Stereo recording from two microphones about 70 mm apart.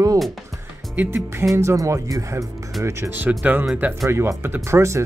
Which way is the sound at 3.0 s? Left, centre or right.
Right.